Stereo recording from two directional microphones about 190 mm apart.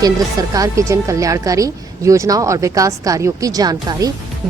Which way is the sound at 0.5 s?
20° right (ahead or behind).